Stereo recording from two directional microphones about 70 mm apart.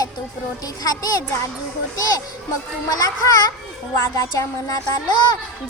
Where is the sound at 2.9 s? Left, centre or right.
Left.